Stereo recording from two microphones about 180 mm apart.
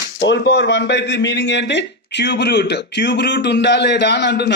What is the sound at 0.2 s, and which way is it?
Speech, 80° left.